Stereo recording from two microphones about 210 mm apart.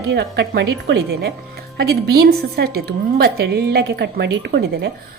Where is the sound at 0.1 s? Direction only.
55° right (ahead or behind).